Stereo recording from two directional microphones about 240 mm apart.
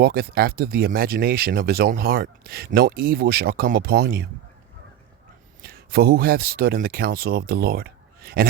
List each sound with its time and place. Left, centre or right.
0.0 s speech: right
5.6 s speech: right